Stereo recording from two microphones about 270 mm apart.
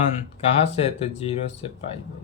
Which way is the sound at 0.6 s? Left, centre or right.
Left.